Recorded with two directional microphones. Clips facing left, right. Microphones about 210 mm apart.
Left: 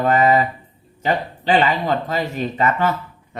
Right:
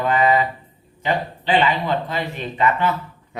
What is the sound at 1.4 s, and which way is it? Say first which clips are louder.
Speech: left 2 dB; 45° left (ahead or behind).